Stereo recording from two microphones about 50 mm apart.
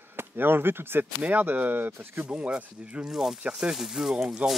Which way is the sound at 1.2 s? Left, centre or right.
Right.